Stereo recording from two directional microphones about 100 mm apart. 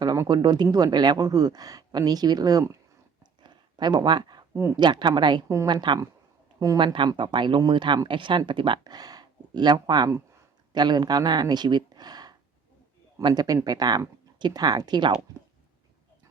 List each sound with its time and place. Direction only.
0.3 s speech: 45° right (ahead or behind)
3.4 s a sound: 45° right (ahead or behind)
4.8 s speech: 50° right (ahead or behind)